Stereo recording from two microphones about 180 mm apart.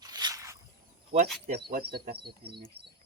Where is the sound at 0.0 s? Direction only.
20° right (ahead or behind).